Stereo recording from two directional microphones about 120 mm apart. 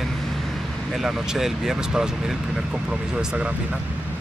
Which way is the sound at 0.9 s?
5° right (ahead or behind).